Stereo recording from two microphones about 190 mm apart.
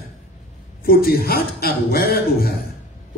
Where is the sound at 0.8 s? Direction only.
50° left (ahead or behind).